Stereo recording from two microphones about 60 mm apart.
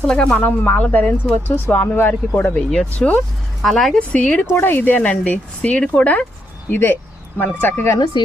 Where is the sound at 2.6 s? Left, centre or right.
Centre.